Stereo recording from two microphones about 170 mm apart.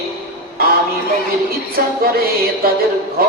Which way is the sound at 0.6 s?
60° right (ahead or behind).